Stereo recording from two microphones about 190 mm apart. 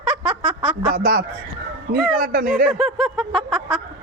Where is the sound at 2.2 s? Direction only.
50° right (ahead or behind).